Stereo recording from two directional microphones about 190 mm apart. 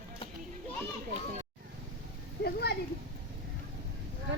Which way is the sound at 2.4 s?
60° left (ahead or behind).